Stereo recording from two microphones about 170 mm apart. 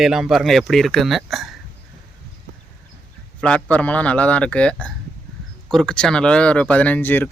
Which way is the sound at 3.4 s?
5° left (ahead or behind).